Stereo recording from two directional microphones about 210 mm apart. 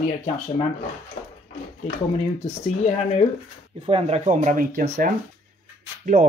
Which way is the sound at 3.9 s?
30° right (ahead or behind).